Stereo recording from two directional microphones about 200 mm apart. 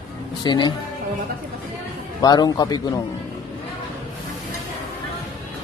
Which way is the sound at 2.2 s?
20° left (ahead or behind).